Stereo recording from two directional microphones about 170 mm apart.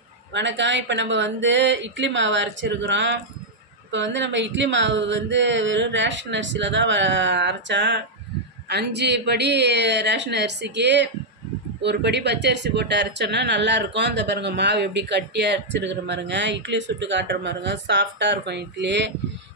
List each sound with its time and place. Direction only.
0.3 s speech: 90° right